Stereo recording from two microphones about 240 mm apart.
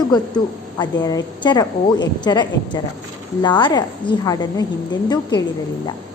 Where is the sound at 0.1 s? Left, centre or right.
Centre.